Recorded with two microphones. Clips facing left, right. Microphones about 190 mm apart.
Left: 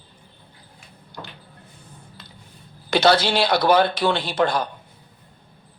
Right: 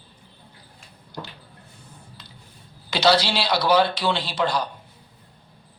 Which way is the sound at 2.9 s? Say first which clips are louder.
Left 2 dB; 55° left (ahead or behind).